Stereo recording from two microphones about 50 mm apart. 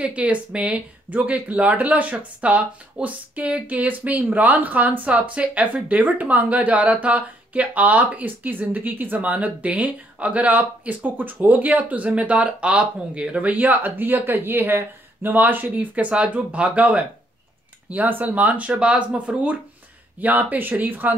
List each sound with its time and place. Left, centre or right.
0.0 s speech: right